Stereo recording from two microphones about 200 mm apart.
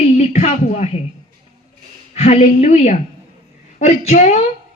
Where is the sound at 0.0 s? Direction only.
30° left (ahead or behind).